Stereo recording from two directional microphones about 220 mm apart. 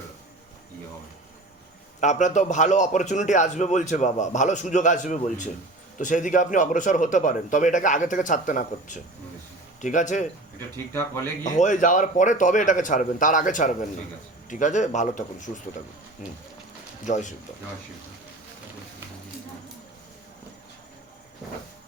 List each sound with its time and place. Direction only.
2.0 s a man's voice: 35° left (ahead or behind)
10.9 s speech: 10° left (ahead or behind)
11.4 s a man's voice: 35° left (ahead or behind)